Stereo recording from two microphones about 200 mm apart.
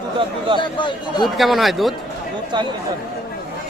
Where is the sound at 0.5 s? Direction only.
25° left (ahead or behind).